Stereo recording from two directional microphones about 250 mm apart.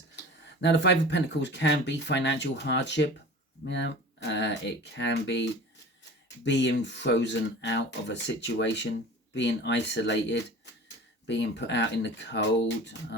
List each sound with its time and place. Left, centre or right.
0.6 s speech: left